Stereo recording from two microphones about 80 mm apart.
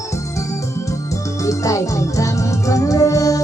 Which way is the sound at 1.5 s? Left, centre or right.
Left.